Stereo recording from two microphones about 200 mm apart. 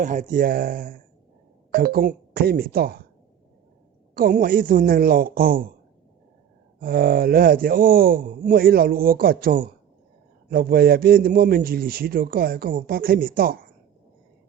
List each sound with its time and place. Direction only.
0.0 s a man's voice: 40° right (ahead or behind)
4.1 s a man's voice: 45° right (ahead or behind)
6.7 s a man's voice: 45° right (ahead or behind)